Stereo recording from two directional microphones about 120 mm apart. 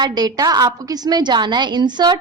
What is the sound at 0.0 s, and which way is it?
A woman's voice, 35° right (ahead or behind).